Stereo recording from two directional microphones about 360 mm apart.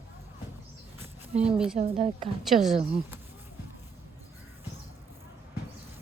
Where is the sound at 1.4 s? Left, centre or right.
Centre.